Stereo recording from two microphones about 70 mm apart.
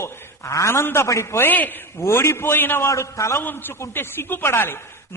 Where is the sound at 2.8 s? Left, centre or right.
Left.